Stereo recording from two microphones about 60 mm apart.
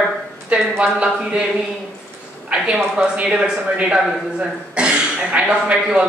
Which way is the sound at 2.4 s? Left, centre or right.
Centre.